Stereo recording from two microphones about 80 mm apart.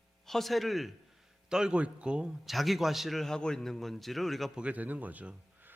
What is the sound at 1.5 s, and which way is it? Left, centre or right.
A man's voice, centre.